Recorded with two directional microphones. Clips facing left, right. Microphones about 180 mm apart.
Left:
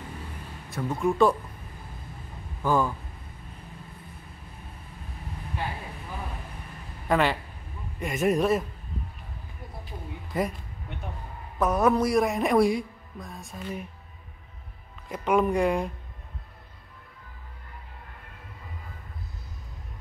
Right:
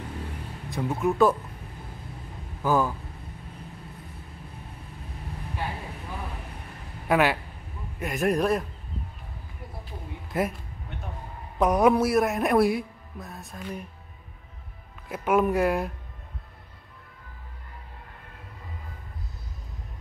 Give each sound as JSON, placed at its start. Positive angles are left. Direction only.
{"t": 0.7, "sound": "music", "side_deg": -15}
{"t": 0.9, "sound": "a man's voice", "side_deg": -5}
{"t": 2.6, "sound": "a man's voice", "side_deg": -5}
{"t": 7.1, "sound": "a man's voice", "side_deg": -5}
{"t": 10.3, "sound": "a man's voice", "side_deg": -5}
{"t": 11.5, "sound": "a man's voice", "side_deg": -15}
{"t": 15.0, "sound": "a man's voice", "side_deg": -5}